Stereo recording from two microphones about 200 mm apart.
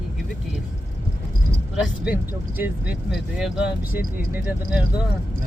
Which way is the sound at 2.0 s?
10° right (ahead or behind).